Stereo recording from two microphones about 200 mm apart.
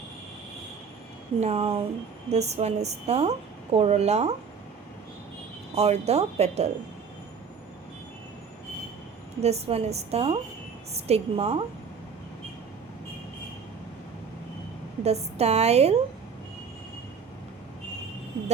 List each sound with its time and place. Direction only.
1.4 s a woman's voice: 30° right (ahead or behind)
5.7 s a woman's voice: 30° right (ahead or behind)
9.4 s a woman's voice: 30° right (ahead or behind)
15.0 s a woman's voice: 30° right (ahead or behind)